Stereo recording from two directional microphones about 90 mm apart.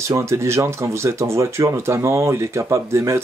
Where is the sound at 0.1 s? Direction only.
30° right (ahead or behind).